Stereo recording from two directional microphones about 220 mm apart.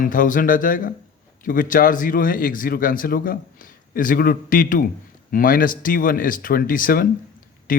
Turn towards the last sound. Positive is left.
turn(degrees=40)  # may be behind; listen again after turning